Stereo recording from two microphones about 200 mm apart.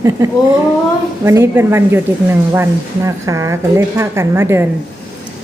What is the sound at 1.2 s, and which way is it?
A woman's voice, 10° right (ahead or behind).